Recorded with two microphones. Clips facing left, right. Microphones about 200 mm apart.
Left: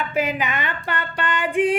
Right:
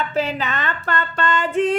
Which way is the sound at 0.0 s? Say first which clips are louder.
Right 1 dB; 10° left (ahead or behind).